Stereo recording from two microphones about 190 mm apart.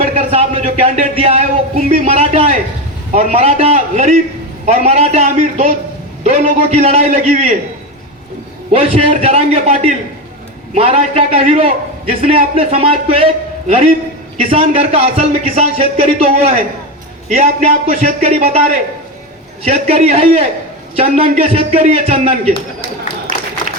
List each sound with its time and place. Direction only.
0.0 s a man's voice: 35° right (ahead or behind)
8.7 s a man's voice: 30° right (ahead or behind)
19.6 s a man's voice: 35° right (ahead or behind)
23.3 s a sound: 45° left (ahead or behind)